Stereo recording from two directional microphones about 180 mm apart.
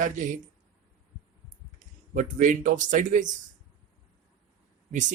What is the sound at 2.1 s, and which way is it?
Speech, 45° right (ahead or behind).